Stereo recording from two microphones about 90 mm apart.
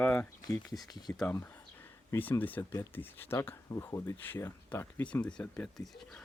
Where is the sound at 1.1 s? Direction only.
25° left (ahead or behind).